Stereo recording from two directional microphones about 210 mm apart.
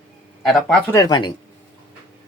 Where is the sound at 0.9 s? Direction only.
20° left (ahead or behind).